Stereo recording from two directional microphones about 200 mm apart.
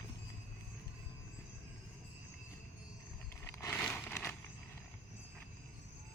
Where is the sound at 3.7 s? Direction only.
5° left (ahead or behind).